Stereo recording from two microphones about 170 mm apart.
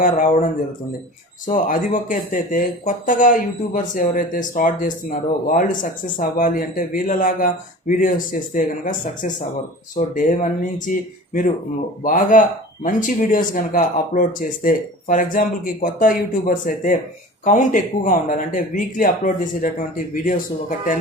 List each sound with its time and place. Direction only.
1.5 s speech: 50° left (ahead or behind)
12.0 s speech: 50° left (ahead or behind)